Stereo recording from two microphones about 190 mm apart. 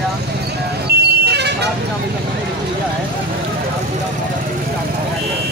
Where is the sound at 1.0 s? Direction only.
60° right (ahead or behind).